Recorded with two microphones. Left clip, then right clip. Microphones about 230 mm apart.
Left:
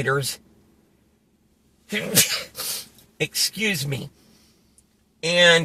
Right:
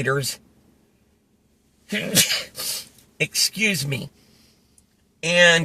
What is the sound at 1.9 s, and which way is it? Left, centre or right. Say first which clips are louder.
A man's voice: right 1 dB; right.